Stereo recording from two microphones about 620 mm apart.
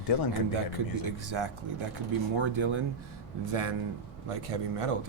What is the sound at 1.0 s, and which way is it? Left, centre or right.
Speech, right.